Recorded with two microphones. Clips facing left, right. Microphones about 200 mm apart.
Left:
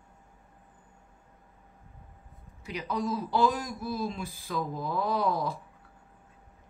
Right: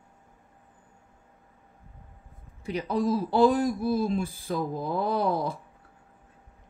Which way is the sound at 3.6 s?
55° right (ahead or behind).